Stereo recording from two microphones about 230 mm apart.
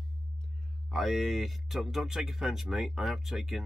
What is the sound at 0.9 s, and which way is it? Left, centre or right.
Speech, centre.